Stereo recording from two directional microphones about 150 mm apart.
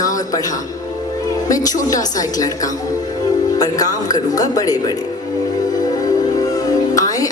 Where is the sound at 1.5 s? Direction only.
25° left (ahead or behind).